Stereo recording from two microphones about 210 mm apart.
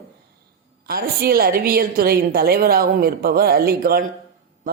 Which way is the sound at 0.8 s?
45° right (ahead or behind).